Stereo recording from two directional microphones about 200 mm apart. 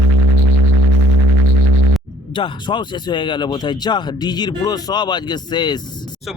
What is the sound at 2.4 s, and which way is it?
Speech, 25° left (ahead or behind).